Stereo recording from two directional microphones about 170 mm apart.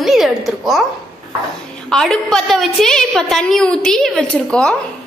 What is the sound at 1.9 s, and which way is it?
A woman's voice, 5° left (ahead or behind).